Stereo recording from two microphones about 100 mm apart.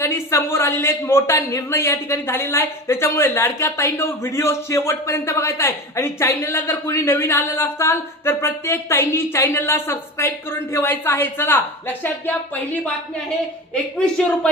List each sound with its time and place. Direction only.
0.0 s a man's voice: 25° left (ahead or behind)